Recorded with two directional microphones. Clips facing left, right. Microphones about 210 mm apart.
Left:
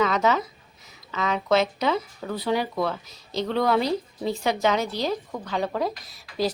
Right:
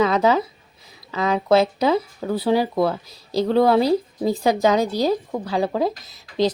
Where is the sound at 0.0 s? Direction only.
30° right (ahead or behind).